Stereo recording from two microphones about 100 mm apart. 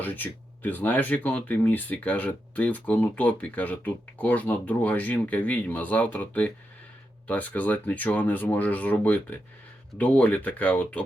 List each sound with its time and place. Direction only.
0.0 s speech: 15° left (ahead or behind)